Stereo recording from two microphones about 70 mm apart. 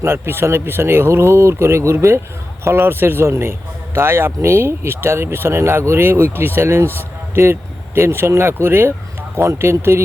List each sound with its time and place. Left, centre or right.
0.0 s speech: right